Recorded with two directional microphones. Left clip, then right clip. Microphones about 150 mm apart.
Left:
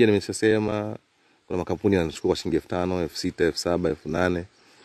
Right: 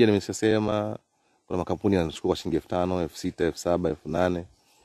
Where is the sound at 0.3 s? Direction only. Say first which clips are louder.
Left 2 dB; 20° right (ahead or behind).